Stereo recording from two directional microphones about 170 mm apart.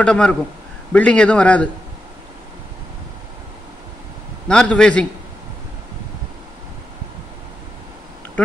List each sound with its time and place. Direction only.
0.0 s a man's voice: 5° left (ahead or behind)
4.5 s a man's voice: 5° left (ahead or behind)